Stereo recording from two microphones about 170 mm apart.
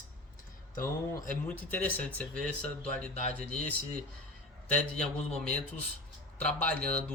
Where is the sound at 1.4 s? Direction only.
10° left (ahead or behind).